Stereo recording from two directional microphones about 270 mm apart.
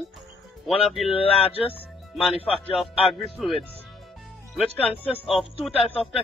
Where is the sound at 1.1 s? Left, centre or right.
Left.